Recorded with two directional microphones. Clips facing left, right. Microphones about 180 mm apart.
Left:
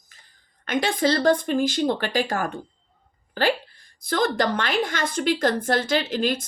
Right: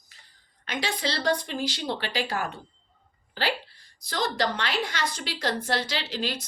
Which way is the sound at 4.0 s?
50° left (ahead or behind).